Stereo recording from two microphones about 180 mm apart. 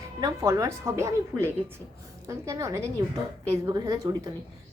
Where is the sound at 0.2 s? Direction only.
20° right (ahead or behind).